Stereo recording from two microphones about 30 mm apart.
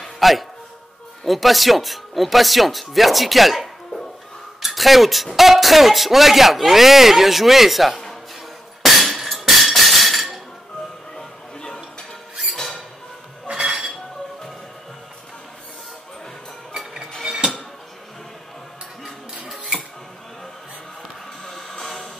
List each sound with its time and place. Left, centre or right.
0.2 s speech: centre
8.8 s glass: centre
13.5 s dishes: right
17.2 s dishes: right
21.5 s music: centre